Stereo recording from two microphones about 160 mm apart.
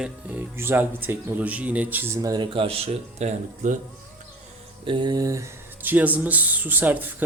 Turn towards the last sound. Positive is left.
turn(degrees=-10)  # may be behind; listen again after turning